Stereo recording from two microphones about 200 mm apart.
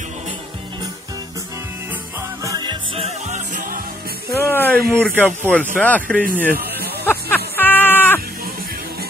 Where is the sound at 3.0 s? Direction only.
35° right (ahead or behind).